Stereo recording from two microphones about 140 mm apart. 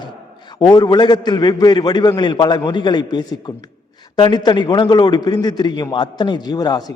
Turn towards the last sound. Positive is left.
turn(degrees=30)  # may be behind; listen again after turning